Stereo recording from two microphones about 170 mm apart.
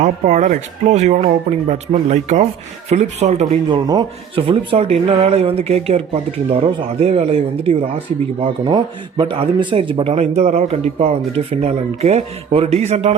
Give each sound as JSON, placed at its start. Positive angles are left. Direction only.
{"t": 0.0, "sound": "speech", "side_deg": -45}
{"t": 3.7, "sound": "speech", "side_deg": -25}